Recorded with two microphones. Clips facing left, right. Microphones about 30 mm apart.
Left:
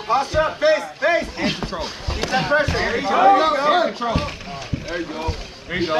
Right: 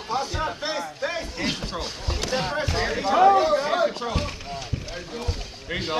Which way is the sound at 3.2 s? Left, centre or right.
Left.